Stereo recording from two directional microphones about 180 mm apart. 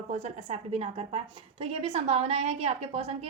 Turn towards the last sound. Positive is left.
turn(degrees=-35)  # may be behind; listen again after turning